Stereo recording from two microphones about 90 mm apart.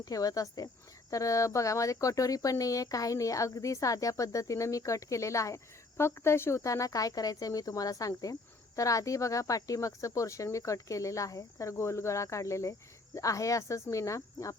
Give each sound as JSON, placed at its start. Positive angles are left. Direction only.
{"t": 0.0, "sound": "speech", "side_deg": 40}